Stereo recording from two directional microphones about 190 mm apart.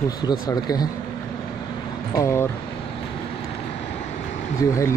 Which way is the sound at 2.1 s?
15° left (ahead or behind).